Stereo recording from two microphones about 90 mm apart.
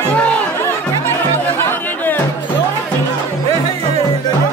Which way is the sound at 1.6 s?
25° left (ahead or behind).